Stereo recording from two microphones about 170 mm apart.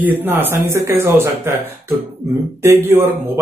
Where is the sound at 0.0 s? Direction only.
10° right (ahead or behind).